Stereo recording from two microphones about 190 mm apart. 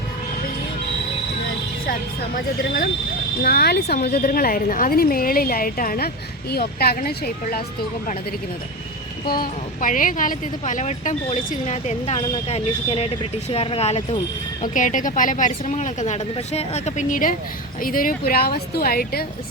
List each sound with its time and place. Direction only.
1.9 s speech: 50° left (ahead or behind)
9.2 s speech: 50° left (ahead or behind)